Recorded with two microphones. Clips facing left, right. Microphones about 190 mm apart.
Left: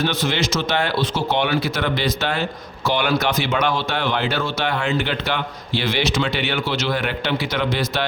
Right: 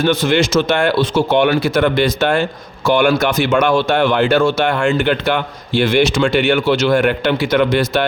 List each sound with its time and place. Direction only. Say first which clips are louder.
0.0 s speech: right 7 dB; 50° right (ahead or behind)